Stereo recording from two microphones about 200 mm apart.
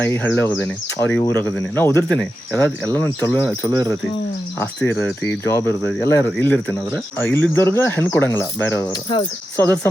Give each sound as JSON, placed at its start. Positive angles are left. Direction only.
{"t": 0.0, "sound": "speech", "side_deg": 10}
{"t": 9.1, "sound": "speech", "side_deg": 25}